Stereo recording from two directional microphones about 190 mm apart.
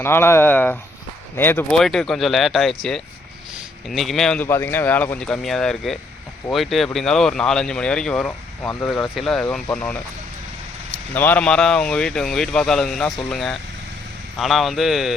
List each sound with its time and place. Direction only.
0.0 s speech: 10° left (ahead or behind)
3.8 s speech: centre (ahead or behind)
11.1 s speech: 10° left (ahead or behind)